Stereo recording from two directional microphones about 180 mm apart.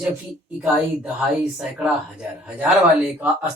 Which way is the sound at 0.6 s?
5° right (ahead or behind).